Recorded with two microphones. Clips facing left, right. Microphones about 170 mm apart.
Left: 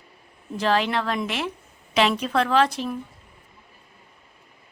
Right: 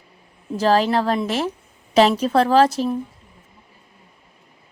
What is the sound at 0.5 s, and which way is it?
Speech, 40° right (ahead or behind).